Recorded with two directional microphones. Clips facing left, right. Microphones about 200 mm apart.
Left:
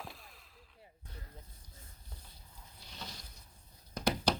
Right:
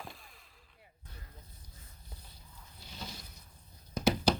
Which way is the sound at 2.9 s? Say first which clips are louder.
Right 3 dB; 5° right (ahead or behind).